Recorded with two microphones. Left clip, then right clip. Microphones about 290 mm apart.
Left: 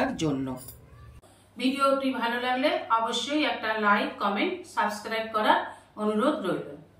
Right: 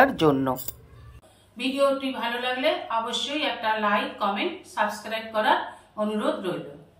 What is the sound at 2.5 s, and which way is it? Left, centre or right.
Speech, centre.